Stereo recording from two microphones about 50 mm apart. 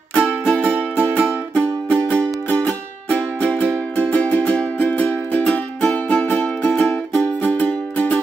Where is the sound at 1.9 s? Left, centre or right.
Left.